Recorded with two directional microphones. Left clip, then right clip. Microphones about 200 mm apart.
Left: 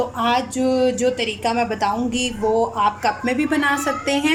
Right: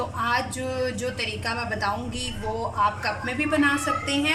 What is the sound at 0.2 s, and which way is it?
Speech, 40° left (ahead or behind).